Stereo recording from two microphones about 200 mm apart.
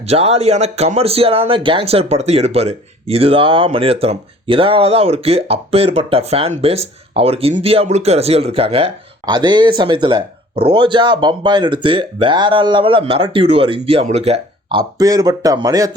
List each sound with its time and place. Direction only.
0.0 s speech: 30° right (ahead or behind)